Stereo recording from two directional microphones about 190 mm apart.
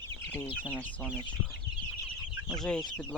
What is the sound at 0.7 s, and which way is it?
Speech, 10° left (ahead or behind).